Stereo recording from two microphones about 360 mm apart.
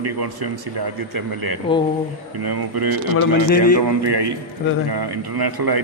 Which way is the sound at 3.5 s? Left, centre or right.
Left.